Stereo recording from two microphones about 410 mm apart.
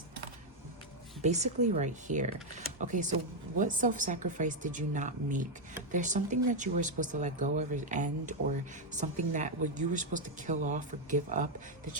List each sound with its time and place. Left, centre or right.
1.2 s a woman's voice: centre